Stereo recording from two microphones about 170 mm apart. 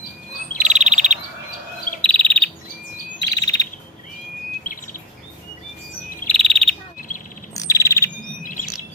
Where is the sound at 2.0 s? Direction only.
10° left (ahead or behind).